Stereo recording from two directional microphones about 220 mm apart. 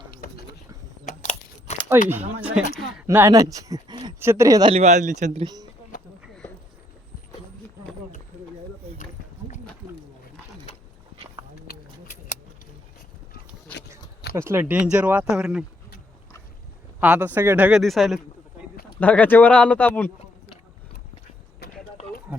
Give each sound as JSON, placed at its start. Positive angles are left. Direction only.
{"t": 0.1, "sound": "a sound", "side_deg": 45}
{"t": 1.0, "sound": "a sound", "side_deg": 30}
{"t": 2.4, "sound": "speech", "side_deg": -5}
{"t": 4.7, "sound": "a man's voice", "side_deg": -30}
{"t": 14.3, "sound": "speech", "side_deg": -10}
{"t": 17.0, "sound": "speech", "side_deg": -5}